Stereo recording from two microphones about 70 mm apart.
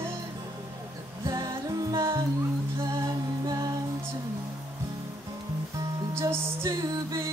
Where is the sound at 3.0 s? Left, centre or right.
Right.